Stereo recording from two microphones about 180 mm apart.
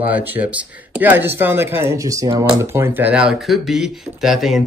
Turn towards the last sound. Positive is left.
turn(degrees=0)  # may be behind; listen again after turning